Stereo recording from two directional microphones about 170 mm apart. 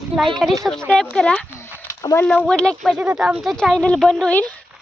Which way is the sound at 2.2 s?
5° left (ahead or behind).